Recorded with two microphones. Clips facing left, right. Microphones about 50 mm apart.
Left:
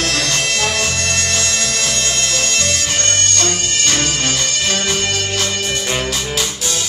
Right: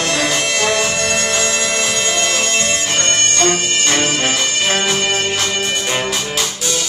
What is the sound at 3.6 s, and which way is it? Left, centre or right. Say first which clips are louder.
Music: right 2 dB; centre.